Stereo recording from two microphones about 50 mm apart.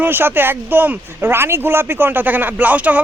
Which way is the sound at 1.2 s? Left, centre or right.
Right.